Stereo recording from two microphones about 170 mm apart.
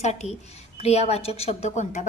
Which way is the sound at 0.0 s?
40° left (ahead or behind).